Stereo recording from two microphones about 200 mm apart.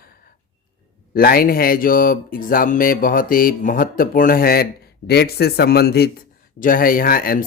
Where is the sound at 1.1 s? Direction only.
50° left (ahead or behind).